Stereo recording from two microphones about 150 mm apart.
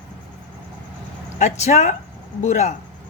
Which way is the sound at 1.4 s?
50° left (ahead or behind).